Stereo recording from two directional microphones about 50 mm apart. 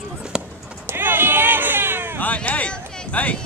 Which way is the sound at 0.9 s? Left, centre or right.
Right.